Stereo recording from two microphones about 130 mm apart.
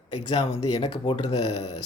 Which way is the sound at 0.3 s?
40° left (ahead or behind).